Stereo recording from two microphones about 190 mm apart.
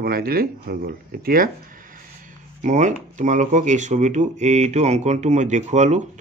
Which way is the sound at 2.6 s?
40° right (ahead or behind).